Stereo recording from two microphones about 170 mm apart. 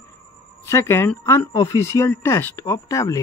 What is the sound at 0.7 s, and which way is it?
Speech, 15° left (ahead or behind).